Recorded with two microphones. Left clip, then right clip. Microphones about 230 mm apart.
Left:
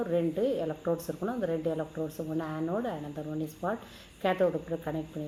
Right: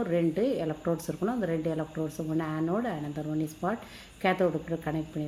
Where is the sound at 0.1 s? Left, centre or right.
Right.